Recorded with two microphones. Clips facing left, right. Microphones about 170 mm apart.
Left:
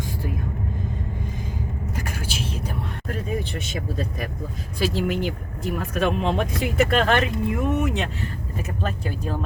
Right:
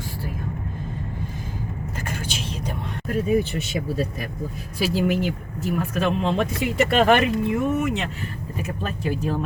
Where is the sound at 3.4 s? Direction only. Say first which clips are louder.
Right 3 dB; 5° right (ahead or behind).